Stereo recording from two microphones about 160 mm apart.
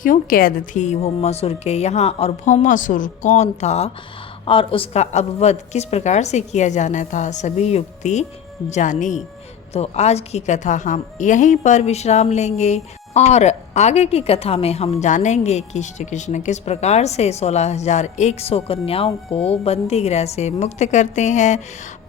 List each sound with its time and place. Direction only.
0.0 s a woman's voice: 60° left (ahead or behind)